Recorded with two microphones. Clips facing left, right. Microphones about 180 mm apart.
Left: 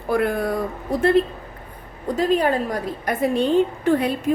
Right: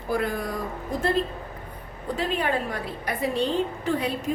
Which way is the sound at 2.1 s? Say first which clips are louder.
Left 7 dB; 40° left (ahead or behind).